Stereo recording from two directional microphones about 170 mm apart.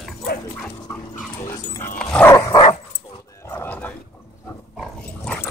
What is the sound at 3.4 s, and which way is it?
Horse, 15° left (ahead or behind).